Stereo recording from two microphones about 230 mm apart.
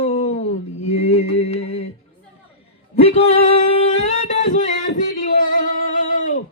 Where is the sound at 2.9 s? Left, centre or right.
Left.